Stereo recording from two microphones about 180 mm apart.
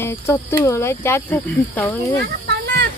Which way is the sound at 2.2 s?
70° right (ahead or behind).